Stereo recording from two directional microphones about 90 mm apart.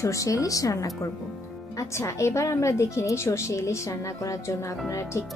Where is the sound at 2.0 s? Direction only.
35° left (ahead or behind).